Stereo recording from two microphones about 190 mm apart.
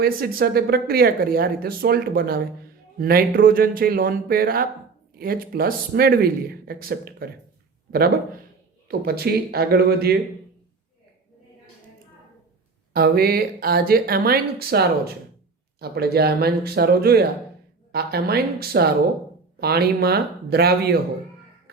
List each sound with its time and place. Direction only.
0.0 s speech: 50° right (ahead or behind)
12.9 s speech: 55° right (ahead or behind)